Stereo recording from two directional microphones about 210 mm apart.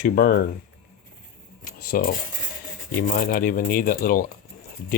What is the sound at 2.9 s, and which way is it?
Speech, 40° left (ahead or behind).